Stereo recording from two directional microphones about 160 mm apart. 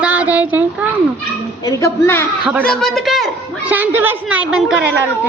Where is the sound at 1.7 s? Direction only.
20° left (ahead or behind).